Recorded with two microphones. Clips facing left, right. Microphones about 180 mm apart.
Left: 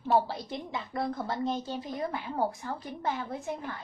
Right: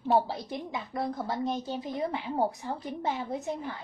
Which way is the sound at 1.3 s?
15° right (ahead or behind).